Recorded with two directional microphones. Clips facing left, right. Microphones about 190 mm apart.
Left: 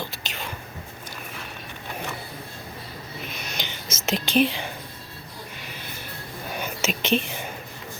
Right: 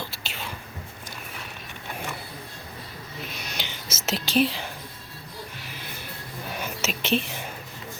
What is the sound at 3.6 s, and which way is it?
Whispering, 5° right (ahead or behind).